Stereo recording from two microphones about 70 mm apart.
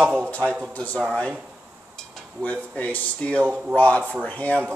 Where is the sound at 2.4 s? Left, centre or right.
Centre.